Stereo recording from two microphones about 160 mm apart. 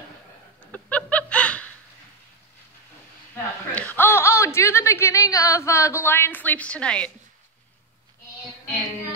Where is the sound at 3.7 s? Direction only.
10° left (ahead or behind).